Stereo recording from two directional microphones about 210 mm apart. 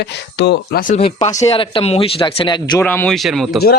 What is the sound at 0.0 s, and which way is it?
Speech, 55° left (ahead or behind).